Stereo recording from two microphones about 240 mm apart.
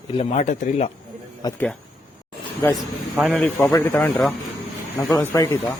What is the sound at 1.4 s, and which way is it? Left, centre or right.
Speech, centre.